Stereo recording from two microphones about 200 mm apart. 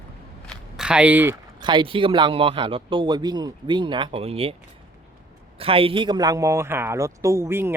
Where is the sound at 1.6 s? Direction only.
25° right (ahead or behind).